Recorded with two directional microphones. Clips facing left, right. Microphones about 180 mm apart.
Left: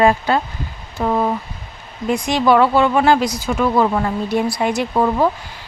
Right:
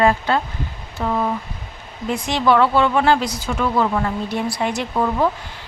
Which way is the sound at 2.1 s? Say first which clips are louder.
Left 3 dB; 15° left (ahead or behind).